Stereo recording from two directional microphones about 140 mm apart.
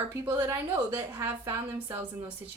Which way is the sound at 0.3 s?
15° right (ahead or behind).